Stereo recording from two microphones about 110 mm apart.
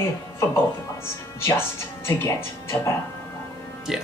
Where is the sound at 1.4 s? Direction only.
25° left (ahead or behind).